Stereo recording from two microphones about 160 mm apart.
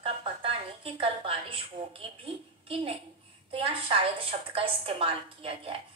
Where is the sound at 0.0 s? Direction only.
35° right (ahead or behind).